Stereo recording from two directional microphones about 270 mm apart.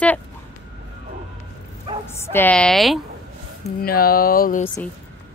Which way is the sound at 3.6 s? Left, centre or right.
Left.